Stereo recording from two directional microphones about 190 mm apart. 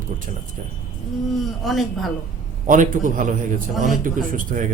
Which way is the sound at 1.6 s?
Centre (ahead or behind).